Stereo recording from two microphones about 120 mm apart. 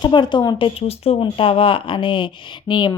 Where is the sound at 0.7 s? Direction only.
55° left (ahead or behind).